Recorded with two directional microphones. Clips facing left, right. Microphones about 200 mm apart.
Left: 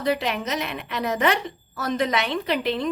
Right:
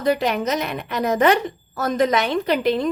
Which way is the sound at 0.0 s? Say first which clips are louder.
Right 4 dB; 45° right (ahead or behind).